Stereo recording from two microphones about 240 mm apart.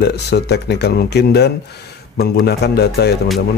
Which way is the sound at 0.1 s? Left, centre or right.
Left.